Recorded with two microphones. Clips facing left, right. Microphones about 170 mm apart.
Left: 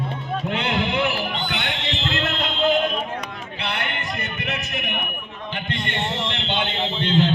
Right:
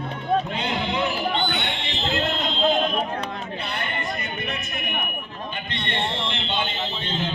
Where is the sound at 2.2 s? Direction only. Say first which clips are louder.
Even; 65° left (ahead or behind).